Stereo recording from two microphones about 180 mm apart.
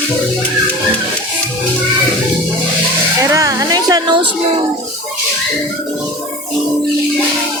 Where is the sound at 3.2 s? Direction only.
20° right (ahead or behind).